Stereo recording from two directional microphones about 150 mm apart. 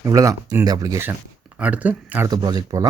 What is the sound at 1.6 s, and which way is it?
Speech, 10° right (ahead or behind).